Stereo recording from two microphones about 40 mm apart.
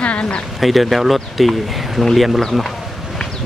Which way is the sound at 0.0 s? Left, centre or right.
Left.